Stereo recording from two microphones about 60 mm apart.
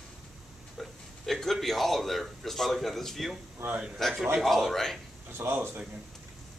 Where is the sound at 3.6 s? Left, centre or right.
Right.